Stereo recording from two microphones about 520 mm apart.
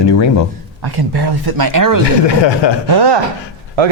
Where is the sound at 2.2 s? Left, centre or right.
Left.